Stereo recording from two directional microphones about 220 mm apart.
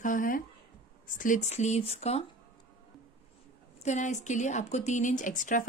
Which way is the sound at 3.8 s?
35° left (ahead or behind).